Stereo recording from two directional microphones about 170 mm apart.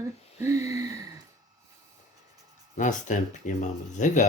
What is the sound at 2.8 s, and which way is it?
Speech, 45° left (ahead or behind).